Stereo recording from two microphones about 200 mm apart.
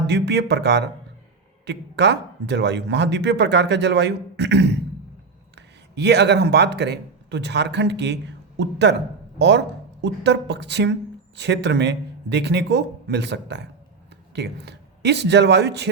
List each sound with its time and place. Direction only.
0.1 s speech: 55° right (ahead or behind)